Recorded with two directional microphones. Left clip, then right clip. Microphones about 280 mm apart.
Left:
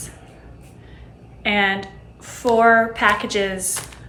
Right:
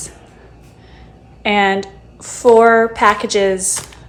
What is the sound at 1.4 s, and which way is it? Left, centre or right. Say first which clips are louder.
A woman's voice: right 5 dB; centre.